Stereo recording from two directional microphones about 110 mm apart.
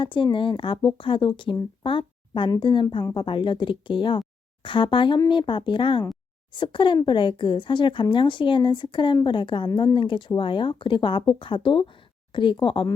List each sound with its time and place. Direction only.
0.0 s a woman's voice: 50° left (ahead or behind)
1.8 s a sound: 50° left (ahead or behind)
2.6 s a woman's voice: 50° left (ahead or behind)